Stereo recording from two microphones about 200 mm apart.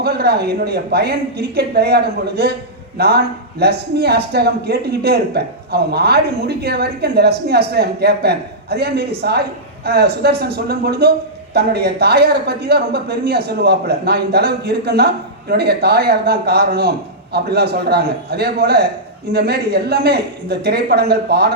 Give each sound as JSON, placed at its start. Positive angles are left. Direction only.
{"t": 0.0, "sound": "a woman's voice", "side_deg": -55}